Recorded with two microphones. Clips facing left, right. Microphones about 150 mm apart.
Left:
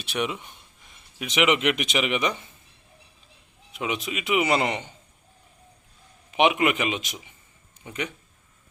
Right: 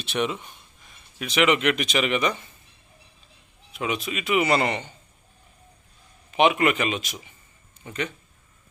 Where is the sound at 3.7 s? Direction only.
20° left (ahead or behind).